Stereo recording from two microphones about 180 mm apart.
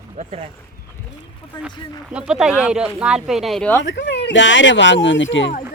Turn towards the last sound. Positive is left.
turn(degrees=90)